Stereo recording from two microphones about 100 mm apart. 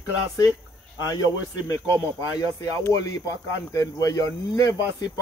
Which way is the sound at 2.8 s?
35° left (ahead or behind).